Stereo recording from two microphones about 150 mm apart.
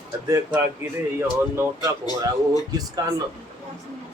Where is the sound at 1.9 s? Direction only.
20° right (ahead or behind).